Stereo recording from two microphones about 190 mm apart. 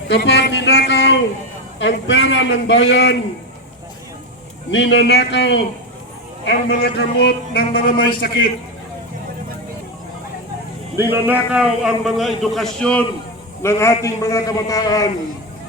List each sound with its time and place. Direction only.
0.1 s a man's voice: 60° left (ahead or behind)
4.7 s a man's voice: 70° left (ahead or behind); by 8.3 s 55° left (ahead or behind)
10.9 s a man's voice: 10° right (ahead or behind); by 15.1 s 20° left (ahead or behind)